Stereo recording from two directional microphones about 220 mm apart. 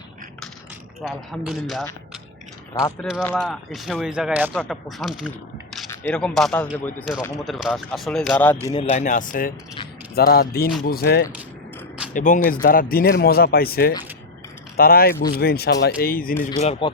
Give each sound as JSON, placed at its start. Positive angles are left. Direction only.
{"t": 1.0, "sound": "speech", "side_deg": 0}
{"t": 2.7, "sound": "speech", "side_deg": 15}
{"t": 5.9, "sound": "speech", "side_deg": 10}
{"t": 8.6, "sound": "speech", "side_deg": 25}
{"t": 16.5, "sound": "speech", "side_deg": 25}